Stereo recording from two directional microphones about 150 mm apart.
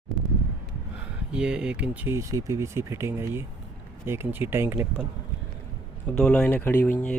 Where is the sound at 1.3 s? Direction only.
5° right (ahead or behind).